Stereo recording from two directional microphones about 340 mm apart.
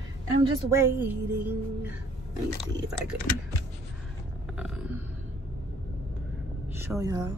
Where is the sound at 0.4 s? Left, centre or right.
Centre.